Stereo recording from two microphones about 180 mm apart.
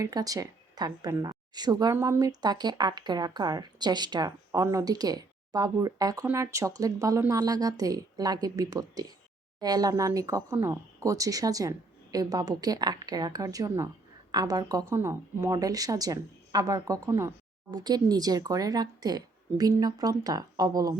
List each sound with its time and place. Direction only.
0.0 s speech: 20° right (ahead or behind)